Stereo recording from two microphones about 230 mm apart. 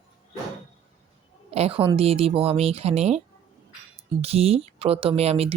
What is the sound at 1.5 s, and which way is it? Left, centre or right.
Speech, right.